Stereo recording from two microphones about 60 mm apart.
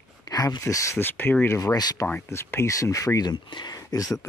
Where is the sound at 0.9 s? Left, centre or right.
Left.